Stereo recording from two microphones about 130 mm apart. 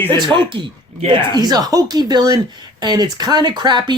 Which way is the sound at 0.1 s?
40° right (ahead or behind).